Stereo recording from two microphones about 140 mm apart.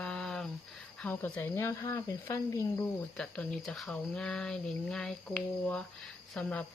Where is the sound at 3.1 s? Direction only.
5° left (ahead or behind).